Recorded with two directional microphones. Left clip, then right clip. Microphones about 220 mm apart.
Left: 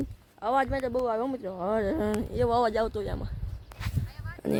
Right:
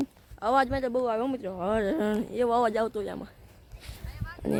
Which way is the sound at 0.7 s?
Centre (ahead or behind).